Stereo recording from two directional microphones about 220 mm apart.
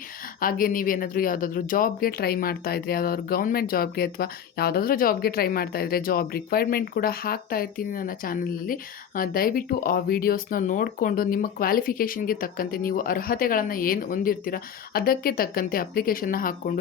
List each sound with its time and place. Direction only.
0.3 s speech: 40° left (ahead or behind)